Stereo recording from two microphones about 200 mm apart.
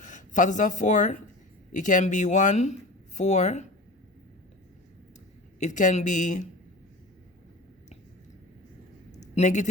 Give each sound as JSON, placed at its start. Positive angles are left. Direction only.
{"t": 0.0, "sound": "speech", "side_deg": 40}
{"t": 5.5, "sound": "speech", "side_deg": 40}
{"t": 9.1, "sound": "a sound", "side_deg": 35}